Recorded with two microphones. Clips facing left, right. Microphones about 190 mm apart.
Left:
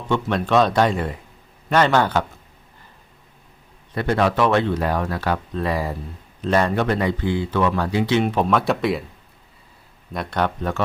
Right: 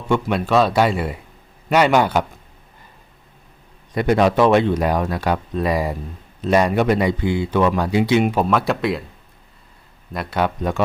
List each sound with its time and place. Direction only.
0.1 s a man's voice: 10° right (ahead or behind)
3.9 s a man's voice: 15° right (ahead or behind); by 9.0 s centre (ahead or behind)
10.1 s a man's voice: 5° right (ahead or behind)